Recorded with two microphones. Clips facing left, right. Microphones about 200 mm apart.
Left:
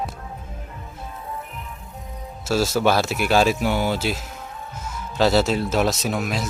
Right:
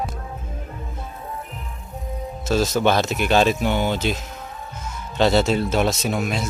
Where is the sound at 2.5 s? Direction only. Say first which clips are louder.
Even; 5° left (ahead or behind).